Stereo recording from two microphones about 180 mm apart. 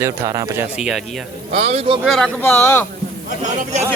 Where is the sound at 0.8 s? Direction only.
5° right (ahead or behind).